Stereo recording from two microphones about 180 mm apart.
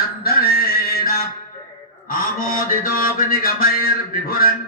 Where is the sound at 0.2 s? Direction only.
55° left (ahead or behind).